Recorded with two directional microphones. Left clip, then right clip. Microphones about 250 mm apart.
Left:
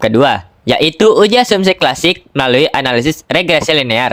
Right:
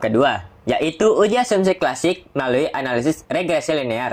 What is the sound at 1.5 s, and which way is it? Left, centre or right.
Speech, left.